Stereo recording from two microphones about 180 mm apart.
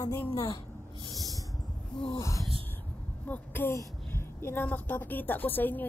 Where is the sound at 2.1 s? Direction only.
15° left (ahead or behind).